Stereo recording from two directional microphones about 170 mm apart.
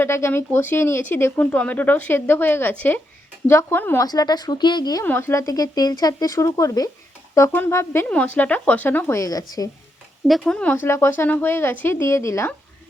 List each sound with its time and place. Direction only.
0.0 s speech: 15° left (ahead or behind)
5.0 s speech: 15° left (ahead or behind)
10.2 s speech: centre (ahead or behind)